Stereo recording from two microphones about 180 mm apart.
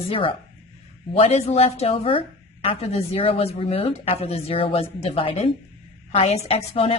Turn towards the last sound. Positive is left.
turn(degrees=35)  # may be behind; listen again after turning